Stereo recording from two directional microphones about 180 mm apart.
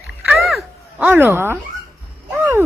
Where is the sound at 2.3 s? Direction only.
10° right (ahead or behind).